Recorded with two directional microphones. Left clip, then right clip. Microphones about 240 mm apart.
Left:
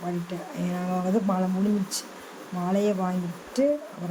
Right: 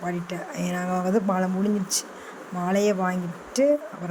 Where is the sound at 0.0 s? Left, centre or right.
Right.